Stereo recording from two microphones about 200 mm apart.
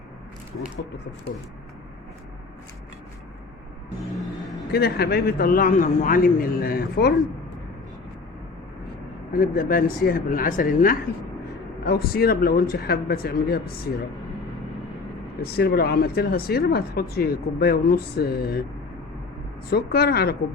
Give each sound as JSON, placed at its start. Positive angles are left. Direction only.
{"t": 0.6, "sound": "speech", "side_deg": 40}
{"t": 4.7, "sound": "speech", "side_deg": 50}
{"t": 9.3, "sound": "speech", "side_deg": 45}
{"t": 15.4, "sound": "speech", "side_deg": 50}
{"t": 19.7, "sound": "speech", "side_deg": 50}